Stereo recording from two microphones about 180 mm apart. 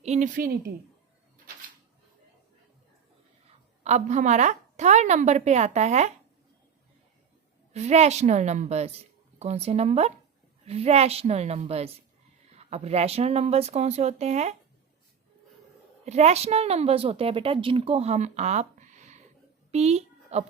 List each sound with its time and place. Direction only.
0.0 s a woman's voice: 40° right (ahead or behind)
3.8 s a woman's voice: 40° right (ahead or behind)
7.7 s a woman's voice: 40° right (ahead or behind)
16.0 s a woman's voice: 40° right (ahead or behind)